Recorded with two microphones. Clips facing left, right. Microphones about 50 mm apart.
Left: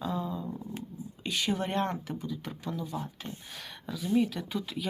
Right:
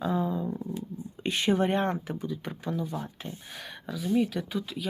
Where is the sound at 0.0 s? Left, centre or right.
Right.